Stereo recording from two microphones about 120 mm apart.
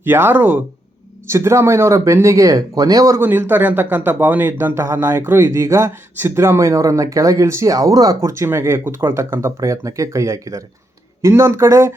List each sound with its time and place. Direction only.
0.0 s speech: 20° right (ahead or behind)
3.2 s speech: 20° right (ahead or behind)